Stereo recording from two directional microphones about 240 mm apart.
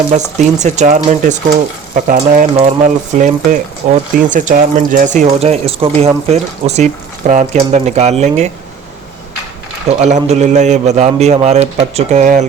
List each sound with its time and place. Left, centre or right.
0.1 s speech: right
9.9 s speech: right